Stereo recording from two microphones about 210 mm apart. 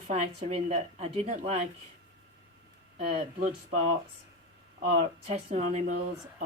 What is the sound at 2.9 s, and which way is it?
Speech, 35° right (ahead or behind).